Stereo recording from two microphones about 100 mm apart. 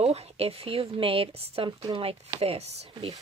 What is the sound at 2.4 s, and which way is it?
Speech, 85° right.